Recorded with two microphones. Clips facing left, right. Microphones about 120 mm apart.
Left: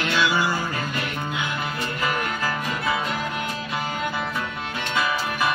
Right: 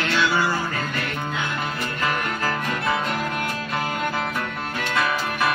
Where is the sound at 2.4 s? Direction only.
5° left (ahead or behind).